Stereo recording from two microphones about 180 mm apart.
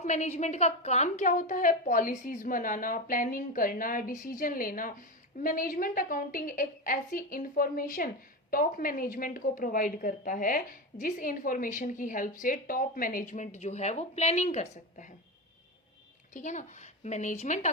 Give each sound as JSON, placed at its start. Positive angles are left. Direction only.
{"t": 0.0, "sound": "a woman's voice", "side_deg": 40}
{"t": 16.3, "sound": "speech", "side_deg": 40}